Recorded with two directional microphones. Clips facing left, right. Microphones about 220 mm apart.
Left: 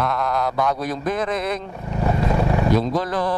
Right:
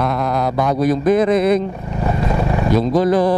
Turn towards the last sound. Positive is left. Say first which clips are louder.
# right 8 dB
turn(degrees=-10)  # may be behind; listen again after turning